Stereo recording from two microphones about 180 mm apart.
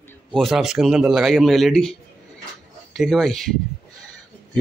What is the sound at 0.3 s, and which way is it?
A man's voice, centre (ahead or behind).